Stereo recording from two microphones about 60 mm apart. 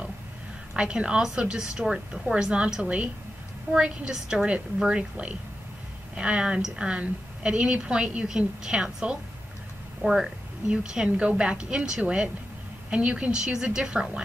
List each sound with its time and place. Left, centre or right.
0.7 s a woman's voice: centre